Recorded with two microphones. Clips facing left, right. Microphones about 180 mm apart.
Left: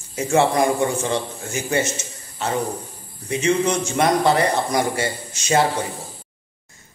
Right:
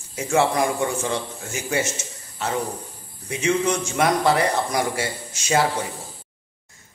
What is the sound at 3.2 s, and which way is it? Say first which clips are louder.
Speech: left 2 dB; 5° right (ahead or behind).